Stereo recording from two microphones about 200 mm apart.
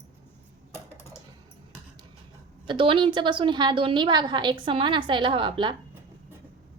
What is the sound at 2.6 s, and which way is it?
A woman's voice, 25° right (ahead or behind).